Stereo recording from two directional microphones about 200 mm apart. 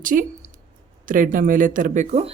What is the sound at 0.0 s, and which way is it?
A woman's voice, 40° right (ahead or behind).